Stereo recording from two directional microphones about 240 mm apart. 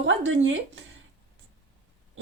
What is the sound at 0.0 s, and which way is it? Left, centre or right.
Speech, right.